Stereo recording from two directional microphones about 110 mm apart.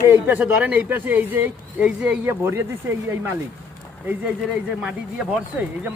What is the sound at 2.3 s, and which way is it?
Speech, 20° right (ahead or behind).